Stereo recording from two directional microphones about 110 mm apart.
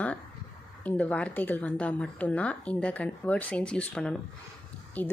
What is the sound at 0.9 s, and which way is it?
Speech, 15° left (ahead or behind).